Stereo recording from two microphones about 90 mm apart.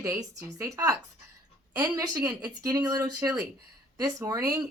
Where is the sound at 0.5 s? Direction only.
35° right (ahead or behind).